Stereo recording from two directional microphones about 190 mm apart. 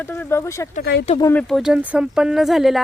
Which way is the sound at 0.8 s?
55° left (ahead or behind).